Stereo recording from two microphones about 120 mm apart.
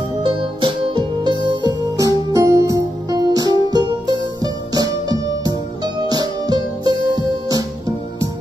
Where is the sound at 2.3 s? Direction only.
25° right (ahead or behind).